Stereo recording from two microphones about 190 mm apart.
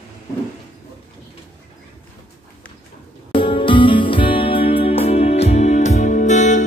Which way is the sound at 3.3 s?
25° left (ahead or behind).